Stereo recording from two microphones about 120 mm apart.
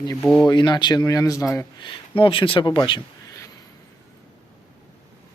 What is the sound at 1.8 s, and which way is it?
Speech, 45° left (ahead or behind).